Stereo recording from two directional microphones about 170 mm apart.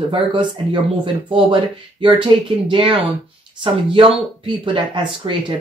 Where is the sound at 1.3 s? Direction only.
30° right (ahead or behind).